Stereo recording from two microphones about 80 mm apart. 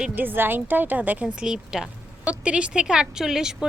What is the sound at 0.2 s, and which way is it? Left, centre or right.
Speech, right.